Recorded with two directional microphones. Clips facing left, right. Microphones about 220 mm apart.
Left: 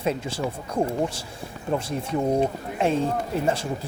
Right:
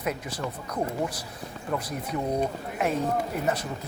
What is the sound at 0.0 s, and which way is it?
Speech, 25° left (ahead or behind).